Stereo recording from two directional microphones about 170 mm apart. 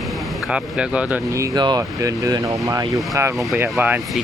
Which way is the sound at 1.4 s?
25° right (ahead or behind).